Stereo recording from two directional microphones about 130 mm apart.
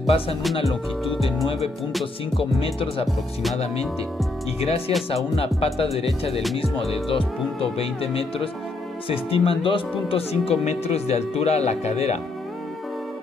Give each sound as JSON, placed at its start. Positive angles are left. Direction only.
{"t": 0.0, "sound": "speech", "side_deg": 45}
{"t": 0.7, "sound": "speech", "side_deg": 0}
{"t": 2.3, "sound": "speech", "side_deg": 45}
{"t": 4.6, "sound": "speech", "side_deg": 50}